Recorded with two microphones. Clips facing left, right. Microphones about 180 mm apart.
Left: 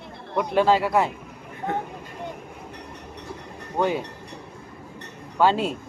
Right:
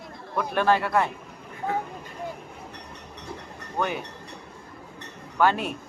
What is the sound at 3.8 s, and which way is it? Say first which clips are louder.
Speech: left 5 dB; 25° left (ahead or behind).